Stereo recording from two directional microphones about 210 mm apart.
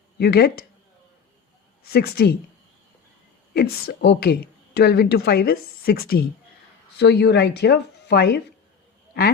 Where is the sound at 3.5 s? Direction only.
55° left (ahead or behind).